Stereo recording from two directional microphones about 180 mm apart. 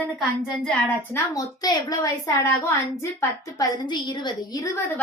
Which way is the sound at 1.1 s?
20° left (ahead or behind).